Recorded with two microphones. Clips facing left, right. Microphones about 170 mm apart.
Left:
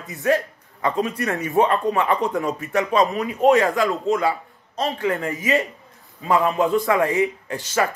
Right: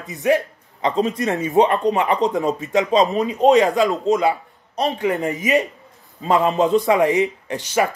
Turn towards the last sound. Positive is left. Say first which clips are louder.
# right 2 dB
turn(degrees=-15)  # may be behind; listen again after turning